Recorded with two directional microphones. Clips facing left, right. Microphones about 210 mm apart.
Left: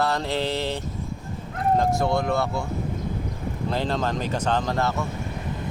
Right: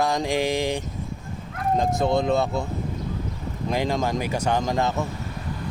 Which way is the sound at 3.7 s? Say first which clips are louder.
Right 2 dB; 10° right (ahead or behind).